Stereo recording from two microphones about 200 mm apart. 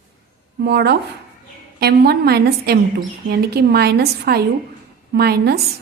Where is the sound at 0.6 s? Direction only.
55° right (ahead or behind).